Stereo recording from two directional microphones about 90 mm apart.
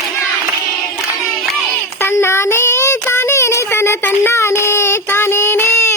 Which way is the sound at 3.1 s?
25° left (ahead or behind).